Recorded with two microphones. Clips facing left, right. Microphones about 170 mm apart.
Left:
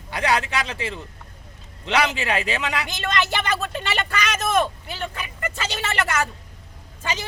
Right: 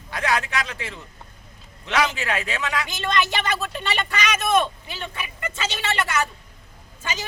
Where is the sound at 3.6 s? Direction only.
45° left (ahead or behind).